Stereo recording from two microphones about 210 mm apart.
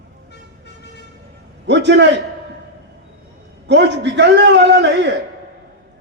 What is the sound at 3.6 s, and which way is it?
A man's voice, 55° right (ahead or behind).